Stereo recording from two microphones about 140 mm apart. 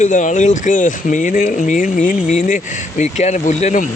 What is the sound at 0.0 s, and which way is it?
Speech, 65° left (ahead or behind).